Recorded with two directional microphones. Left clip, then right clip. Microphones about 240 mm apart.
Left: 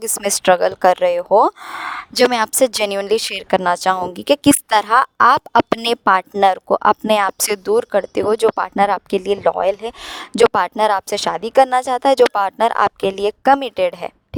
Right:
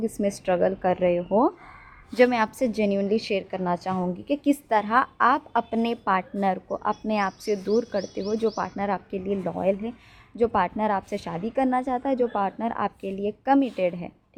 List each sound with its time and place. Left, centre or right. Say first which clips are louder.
0.0 s speech: left 9 dB; left